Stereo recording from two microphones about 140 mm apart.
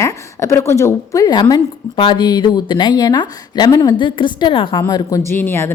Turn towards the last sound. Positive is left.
turn(degrees=15)  # may be behind; listen again after turning